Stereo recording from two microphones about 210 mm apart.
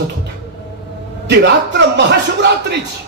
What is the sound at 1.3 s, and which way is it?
Speech, 55° right (ahead or behind).